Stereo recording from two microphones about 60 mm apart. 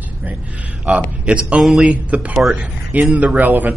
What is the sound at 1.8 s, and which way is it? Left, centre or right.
A man's voice, right.